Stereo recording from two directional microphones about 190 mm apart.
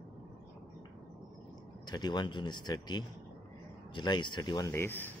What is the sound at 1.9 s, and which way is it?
Speech, 20° left (ahead or behind).